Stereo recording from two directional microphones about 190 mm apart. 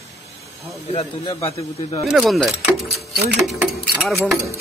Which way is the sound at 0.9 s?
30° left (ahead or behind).